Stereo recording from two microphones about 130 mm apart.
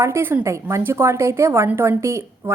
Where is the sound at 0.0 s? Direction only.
20° right (ahead or behind).